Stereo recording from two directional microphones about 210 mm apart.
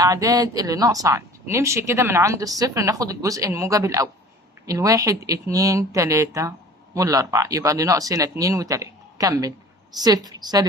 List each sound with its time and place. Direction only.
0.0 s a woman's voice: 15° right (ahead or behind)